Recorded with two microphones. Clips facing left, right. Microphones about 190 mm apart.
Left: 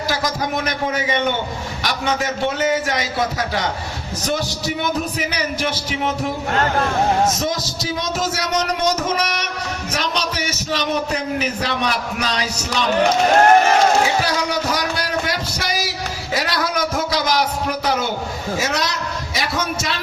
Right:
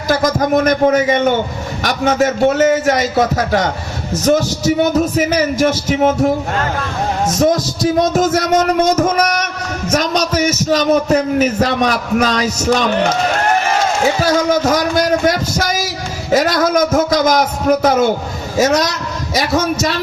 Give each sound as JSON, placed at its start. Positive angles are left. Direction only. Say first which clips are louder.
{"t": 0.1, "sound": "a man's voice", "louder": "right 11 dB", "side_deg": -45}
{"t": 7.3, "sound": "a man's voice", "louder": "right 9 dB", "side_deg": -50}
{"t": 14.3, "sound": "a man's voice", "louder": "right 8 dB", "side_deg": -45}